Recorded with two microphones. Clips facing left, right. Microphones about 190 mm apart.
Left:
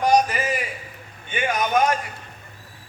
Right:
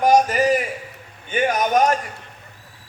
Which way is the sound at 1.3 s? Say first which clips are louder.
Right 4 dB; 40° right (ahead or behind).